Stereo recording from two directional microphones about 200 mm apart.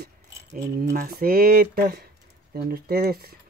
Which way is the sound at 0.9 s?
50° right (ahead or behind).